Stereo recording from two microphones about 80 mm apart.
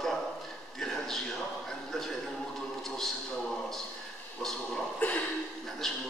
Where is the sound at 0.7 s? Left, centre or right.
Centre.